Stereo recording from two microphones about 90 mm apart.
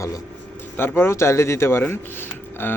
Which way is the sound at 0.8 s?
25° left (ahead or behind).